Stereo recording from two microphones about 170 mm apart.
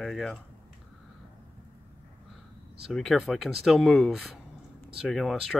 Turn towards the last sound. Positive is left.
turn(degrees=0)  # may be behind; listen again after turning